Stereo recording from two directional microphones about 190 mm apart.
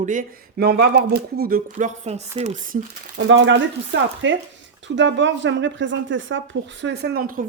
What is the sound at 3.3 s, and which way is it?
Speech, 70° right (ahead or behind).